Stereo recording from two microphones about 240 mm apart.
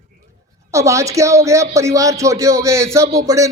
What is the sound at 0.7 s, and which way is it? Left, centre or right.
Speech, centre.